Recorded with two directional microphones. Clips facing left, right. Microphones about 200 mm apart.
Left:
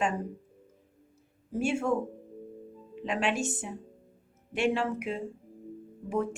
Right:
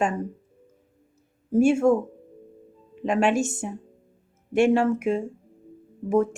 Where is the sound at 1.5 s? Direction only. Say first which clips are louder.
Right 10 dB; 45° right (ahead or behind).